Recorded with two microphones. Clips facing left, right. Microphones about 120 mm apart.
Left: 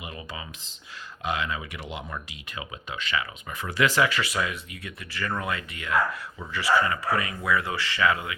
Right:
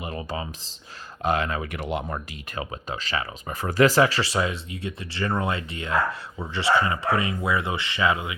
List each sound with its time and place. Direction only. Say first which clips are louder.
0.0 s speech: right 7 dB; 40° right (ahead or behind); by 8.4 s 20° right (ahead or behind)